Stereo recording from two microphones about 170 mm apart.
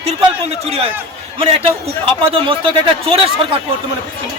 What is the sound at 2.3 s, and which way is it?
Speech, 30° right (ahead or behind).